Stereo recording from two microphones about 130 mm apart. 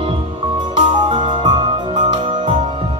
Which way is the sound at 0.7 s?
40° right (ahead or behind).